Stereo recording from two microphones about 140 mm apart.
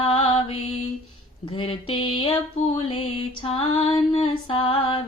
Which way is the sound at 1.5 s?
40° left (ahead or behind).